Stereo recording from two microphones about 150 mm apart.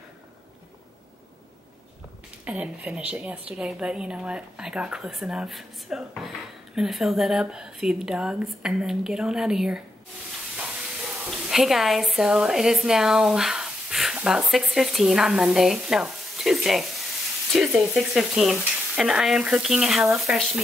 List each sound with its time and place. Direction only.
2.4 s a woman's voice: 10° right (ahead or behind)
11.2 s a woman's voice: centre (ahead or behind)